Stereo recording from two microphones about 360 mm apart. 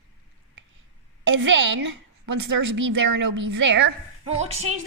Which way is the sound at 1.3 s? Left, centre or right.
Right.